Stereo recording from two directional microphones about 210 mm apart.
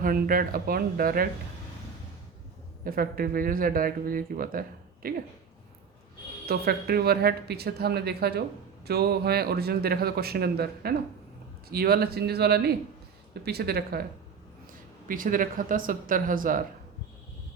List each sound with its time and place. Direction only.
0.0 s speech: 40° right (ahead or behind)
2.8 s speech: 45° right (ahead or behind)
6.4 s speech: 45° right (ahead or behind)